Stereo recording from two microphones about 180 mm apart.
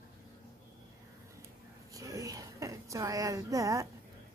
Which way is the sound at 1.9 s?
20° right (ahead or behind).